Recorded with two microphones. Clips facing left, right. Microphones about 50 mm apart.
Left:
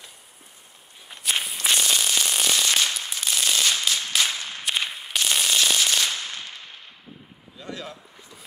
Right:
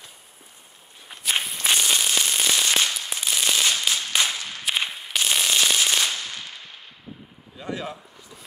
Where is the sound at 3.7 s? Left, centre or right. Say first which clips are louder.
Right 1 dB; centre.